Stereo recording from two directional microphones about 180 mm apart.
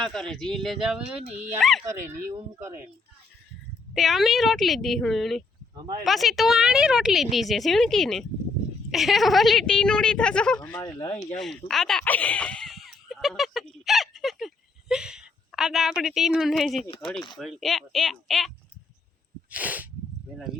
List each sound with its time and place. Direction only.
0.0 s speech: 5° left (ahead or behind)
3.9 s speech: centre (ahead or behind); by 11.3 s 20° left (ahead or behind)
11.3 s a sound: centre (ahead or behind)
16.0 s speech: centre (ahead or behind)
19.5 s sneeze: 10° right (ahead or behind)